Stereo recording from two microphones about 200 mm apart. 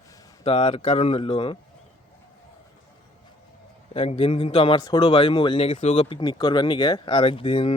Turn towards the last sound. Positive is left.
turn(degrees=25)  # may be behind; listen again after turning